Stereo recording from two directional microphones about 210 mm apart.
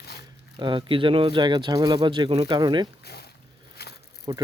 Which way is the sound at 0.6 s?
25° right (ahead or behind).